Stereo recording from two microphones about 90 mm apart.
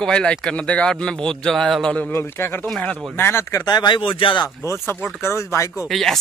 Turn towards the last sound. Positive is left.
turn(degrees=5)  # may be behind; listen again after turning